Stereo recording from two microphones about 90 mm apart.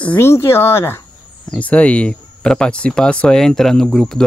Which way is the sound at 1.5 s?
15° left (ahead or behind).